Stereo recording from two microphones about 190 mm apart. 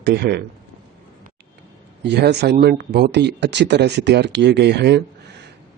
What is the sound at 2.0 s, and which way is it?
Speech, 60° right (ahead or behind).